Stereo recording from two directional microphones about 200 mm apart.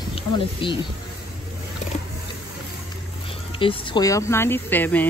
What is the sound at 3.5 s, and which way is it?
Speech, 25° left (ahead or behind).